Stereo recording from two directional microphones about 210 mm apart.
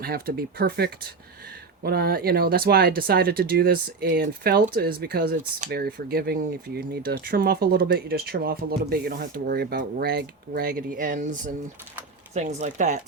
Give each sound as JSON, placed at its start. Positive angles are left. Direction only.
{"t": 0.0, "sound": "speech", "side_deg": -45}